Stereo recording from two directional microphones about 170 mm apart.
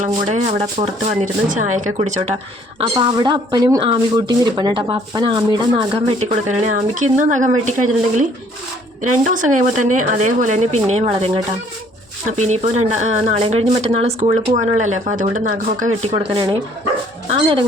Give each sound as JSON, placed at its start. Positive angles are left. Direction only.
{"t": 0.0, "sound": "speech", "side_deg": -40}
{"t": 12.4, "sound": "speech", "side_deg": -45}
{"t": 16.1, "sound": "speech", "side_deg": -30}